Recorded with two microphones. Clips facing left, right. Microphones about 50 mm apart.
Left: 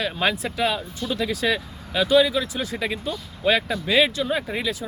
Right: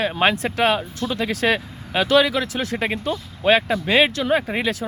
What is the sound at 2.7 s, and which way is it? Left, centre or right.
Speech, right.